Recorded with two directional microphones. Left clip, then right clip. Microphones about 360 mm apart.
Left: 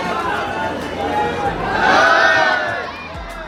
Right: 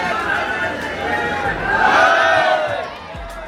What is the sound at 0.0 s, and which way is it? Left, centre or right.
Chatter, centre.